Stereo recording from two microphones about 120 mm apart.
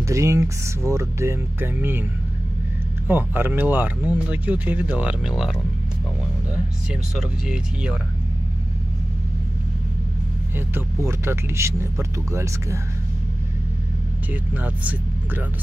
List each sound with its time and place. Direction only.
0.0 s speech: 25° right (ahead or behind)
3.1 s speech: 15° right (ahead or behind)
6.9 s speech: 5° right (ahead or behind)
10.7 s speech: 20° right (ahead or behind)
14.3 s speech: 10° right (ahead or behind)